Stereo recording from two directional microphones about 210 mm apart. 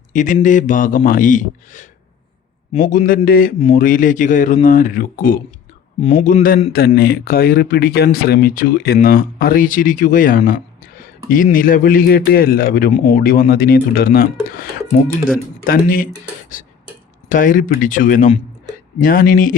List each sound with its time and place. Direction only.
0.1 s a man's voice: 35° left (ahead or behind)
6.0 s a man's voice: 30° left (ahead or behind)
6.7 s speech: 50° left (ahead or behind)
17.2 s a man's voice: 40° left (ahead or behind)